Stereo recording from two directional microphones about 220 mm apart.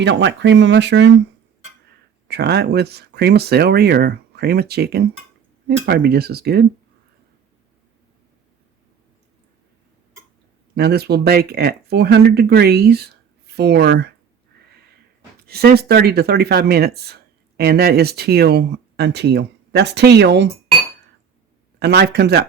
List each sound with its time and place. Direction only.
0.0 s speech: 55° right (ahead or behind)
2.2 s speech: 50° right (ahead or behind)
10.8 s speech: 45° right (ahead or behind)
15.4 s speech: 45° right (ahead or behind)
21.8 s speech: 50° right (ahead or behind)